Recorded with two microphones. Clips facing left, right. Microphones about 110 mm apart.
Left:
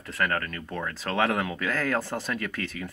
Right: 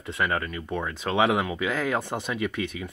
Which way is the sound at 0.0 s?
10° right (ahead or behind).